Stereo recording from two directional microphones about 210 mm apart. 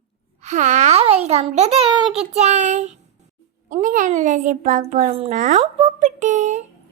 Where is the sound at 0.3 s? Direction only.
35° right (ahead or behind).